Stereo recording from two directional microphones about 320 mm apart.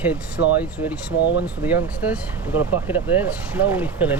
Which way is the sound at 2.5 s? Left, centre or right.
Left.